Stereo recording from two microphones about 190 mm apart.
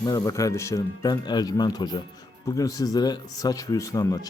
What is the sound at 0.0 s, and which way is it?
Speech, 20° left (ahead or behind).